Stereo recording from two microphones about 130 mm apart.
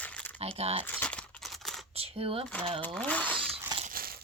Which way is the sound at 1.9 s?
45° right (ahead or behind).